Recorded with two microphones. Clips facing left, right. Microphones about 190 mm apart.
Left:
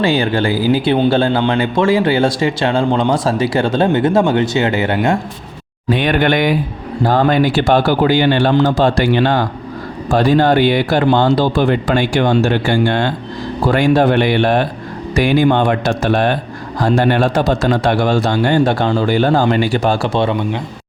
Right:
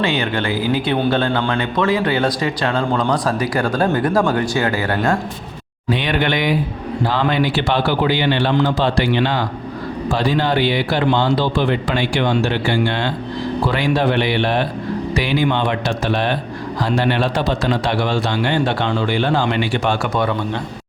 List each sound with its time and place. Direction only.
0.0 s a man's voice: 35° left (ahead or behind)
5.9 s a man's voice: 50° left (ahead or behind); by 20.3 s 30° left (ahead or behind)